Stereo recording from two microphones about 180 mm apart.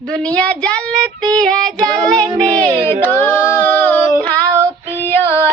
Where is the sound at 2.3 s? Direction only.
20° right (ahead or behind).